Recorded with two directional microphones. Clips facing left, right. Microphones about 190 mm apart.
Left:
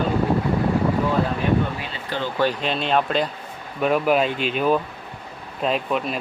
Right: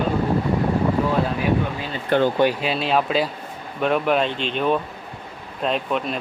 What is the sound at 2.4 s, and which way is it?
A man's voice, 10° right (ahead or behind).